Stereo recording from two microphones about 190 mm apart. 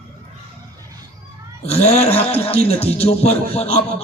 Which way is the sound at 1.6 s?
35° left (ahead or behind).